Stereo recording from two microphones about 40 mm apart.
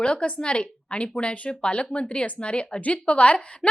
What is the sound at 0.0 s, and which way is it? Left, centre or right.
A woman's voice, left.